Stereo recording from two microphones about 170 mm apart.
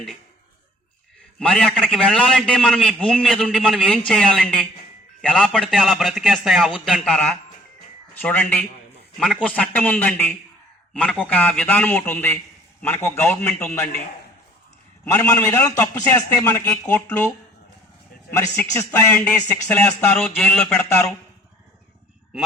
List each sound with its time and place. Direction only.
1.4 s a man's voice: 5° left (ahead or behind)
15.0 s a man's voice: 20° left (ahead or behind)
18.5 s a man's voice: 15° left (ahead or behind)